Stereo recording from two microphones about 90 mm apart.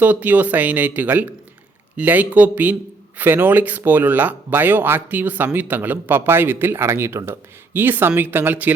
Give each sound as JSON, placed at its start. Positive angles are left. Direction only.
{"t": 0.0, "sound": "speech", "side_deg": -20}